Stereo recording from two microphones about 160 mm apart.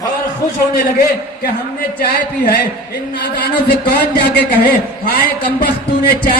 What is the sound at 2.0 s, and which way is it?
A man's voice, 70° left (ahead or behind).